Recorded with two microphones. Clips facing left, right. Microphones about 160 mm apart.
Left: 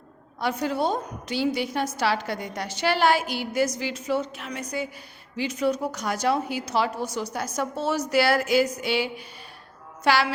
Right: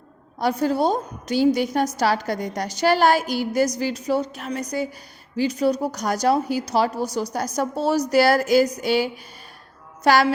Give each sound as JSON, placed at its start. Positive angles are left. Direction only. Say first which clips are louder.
{"t": 0.3, "sound": "a woman's voice", "louder": "right 5 dB", "side_deg": -40}